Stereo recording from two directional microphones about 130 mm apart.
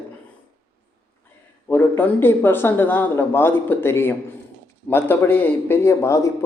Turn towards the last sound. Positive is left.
turn(degrees=25)  # may be behind; listen again after turning